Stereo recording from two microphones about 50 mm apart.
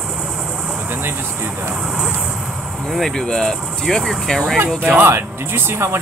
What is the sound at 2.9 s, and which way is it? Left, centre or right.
Speech, centre.